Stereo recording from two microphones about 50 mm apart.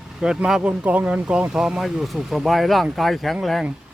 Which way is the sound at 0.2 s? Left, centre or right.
Centre.